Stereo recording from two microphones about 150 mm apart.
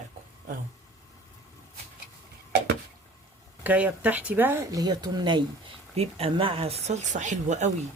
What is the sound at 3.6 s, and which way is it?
Speech, 10° right (ahead or behind).